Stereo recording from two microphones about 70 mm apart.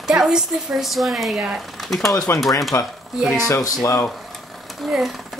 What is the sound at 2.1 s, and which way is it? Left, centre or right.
Speech, left.